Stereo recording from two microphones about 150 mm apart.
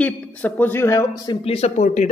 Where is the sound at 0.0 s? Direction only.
10° left (ahead or behind); by 1.4 s 25° left (ahead or behind).